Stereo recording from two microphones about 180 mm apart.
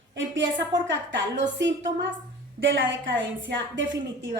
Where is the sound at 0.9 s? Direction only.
90° right.